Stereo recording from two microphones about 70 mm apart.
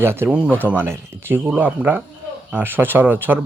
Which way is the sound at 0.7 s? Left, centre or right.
Right.